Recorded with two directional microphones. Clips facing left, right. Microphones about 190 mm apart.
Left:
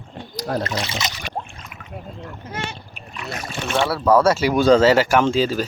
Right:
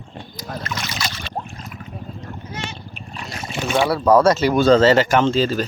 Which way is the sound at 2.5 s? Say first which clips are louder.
Left 2 dB; 55° left (ahead or behind).